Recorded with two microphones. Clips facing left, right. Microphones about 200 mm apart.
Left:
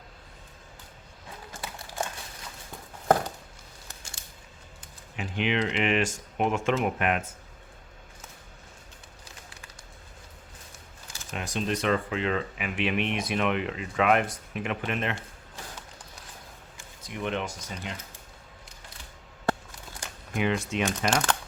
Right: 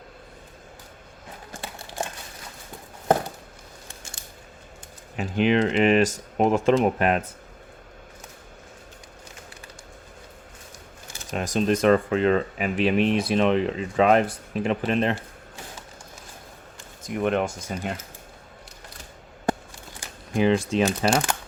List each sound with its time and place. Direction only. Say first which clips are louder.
2.0 s a sound: right 2 dB; 25° right (ahead or behind)
5.1 s speech: right 7 dB; 40° right (ahead or behind)
11.3 s speech: right 7 dB; 40° right (ahead or behind)
17.0 s speech: right 8 dB; 50° right (ahead or behind)
20.3 s speech: right 7 dB; 30° right (ahead or behind)